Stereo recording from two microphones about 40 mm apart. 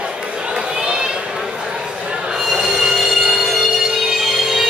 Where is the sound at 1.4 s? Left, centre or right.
Centre.